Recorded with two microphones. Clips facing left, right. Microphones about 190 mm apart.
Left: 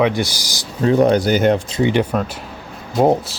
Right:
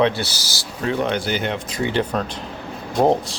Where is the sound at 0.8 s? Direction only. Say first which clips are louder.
Left 8 dB; 40° left (ahead or behind).